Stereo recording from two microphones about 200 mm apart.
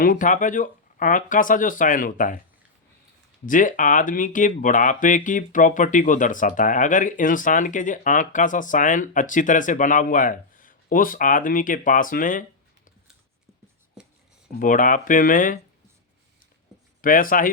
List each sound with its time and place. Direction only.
0.0 s speech: 40° left (ahead or behind)
3.4 s speech: 40° left (ahead or behind)
14.5 s speech: 40° left (ahead or behind)
17.0 s speech: 45° left (ahead or behind)